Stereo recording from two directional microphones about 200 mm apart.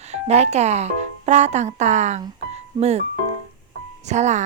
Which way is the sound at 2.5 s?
30° right (ahead or behind).